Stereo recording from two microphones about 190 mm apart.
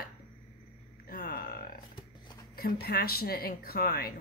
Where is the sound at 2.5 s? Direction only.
55° left (ahead or behind).